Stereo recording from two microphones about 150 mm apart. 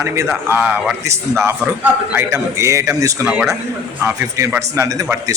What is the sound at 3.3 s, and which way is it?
A man's voice, 5° right (ahead or behind).